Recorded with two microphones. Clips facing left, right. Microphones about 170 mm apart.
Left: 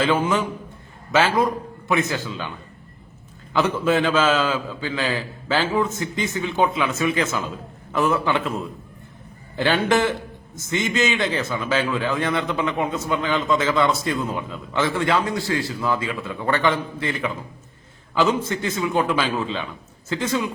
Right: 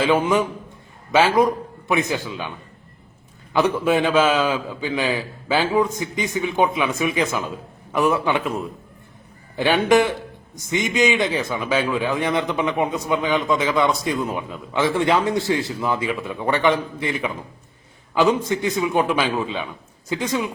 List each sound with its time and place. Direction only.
0.0 s a man's voice: 15° right (ahead or behind)
3.5 s a man's voice: 15° right (ahead or behind)